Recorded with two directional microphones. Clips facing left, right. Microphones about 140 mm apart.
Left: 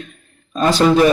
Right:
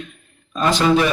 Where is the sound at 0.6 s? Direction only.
40° left (ahead or behind).